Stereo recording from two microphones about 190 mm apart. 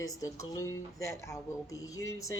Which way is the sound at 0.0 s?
15° left (ahead or behind).